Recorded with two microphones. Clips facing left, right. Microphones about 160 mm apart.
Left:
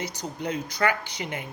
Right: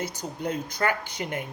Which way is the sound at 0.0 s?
50° right (ahead or behind).